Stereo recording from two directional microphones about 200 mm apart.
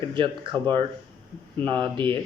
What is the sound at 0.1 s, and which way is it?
Speech, 25° right (ahead or behind).